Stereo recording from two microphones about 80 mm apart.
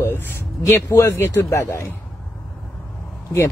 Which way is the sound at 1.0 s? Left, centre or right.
Left.